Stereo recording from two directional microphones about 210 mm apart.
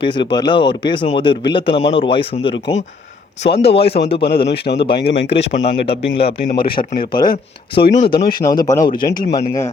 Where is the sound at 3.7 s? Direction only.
50° left (ahead or behind).